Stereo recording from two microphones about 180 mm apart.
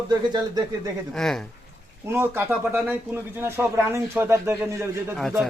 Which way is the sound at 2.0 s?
15° right (ahead or behind).